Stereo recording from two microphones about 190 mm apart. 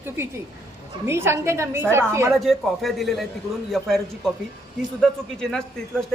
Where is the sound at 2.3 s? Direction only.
Centre (ahead or behind).